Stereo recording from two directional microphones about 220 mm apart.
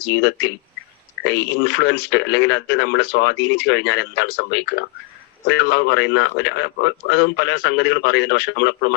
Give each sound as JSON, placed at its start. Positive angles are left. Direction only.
{"t": 0.1, "sound": "speech", "side_deg": 55}